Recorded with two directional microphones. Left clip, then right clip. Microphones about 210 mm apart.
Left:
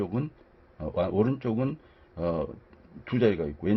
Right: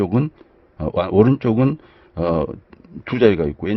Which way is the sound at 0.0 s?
50° right (ahead or behind).